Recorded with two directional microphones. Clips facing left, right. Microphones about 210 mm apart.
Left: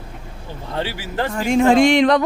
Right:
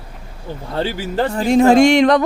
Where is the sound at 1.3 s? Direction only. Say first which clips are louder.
Right 3 dB; 35° right (ahead or behind).